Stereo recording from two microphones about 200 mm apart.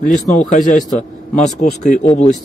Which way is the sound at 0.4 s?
35° left (ahead or behind).